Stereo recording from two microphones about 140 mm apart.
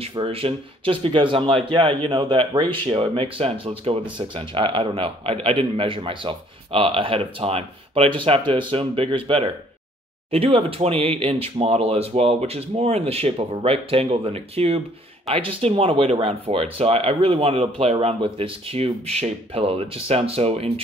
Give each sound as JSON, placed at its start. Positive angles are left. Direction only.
{"t": 0.0, "sound": "speech", "side_deg": -40}